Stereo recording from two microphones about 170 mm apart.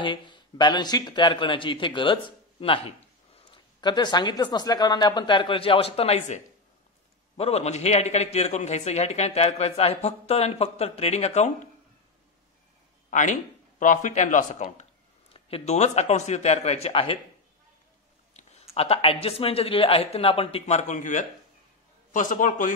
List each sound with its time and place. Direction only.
0.0 s a man's voice: 25° left (ahead or behind); by 11.7 s 45° left (ahead or behind)
13.1 s a man's voice: 45° left (ahead or behind)
18.8 s a man's voice: 35° left (ahead or behind)